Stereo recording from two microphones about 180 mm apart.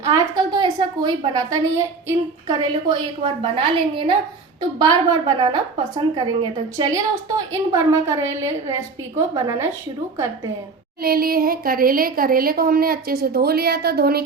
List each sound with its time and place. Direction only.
0.0 s a woman's voice: 20° right (ahead or behind)
11.0 s a woman's voice: 55° right (ahead or behind)